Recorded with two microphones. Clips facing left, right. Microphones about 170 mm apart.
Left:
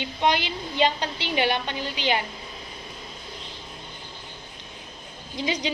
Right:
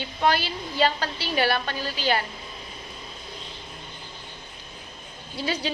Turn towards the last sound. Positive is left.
turn(degrees=15)  # may be behind; listen again after turning